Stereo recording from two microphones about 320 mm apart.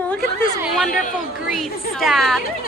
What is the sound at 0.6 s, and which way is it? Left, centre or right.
Speech, centre.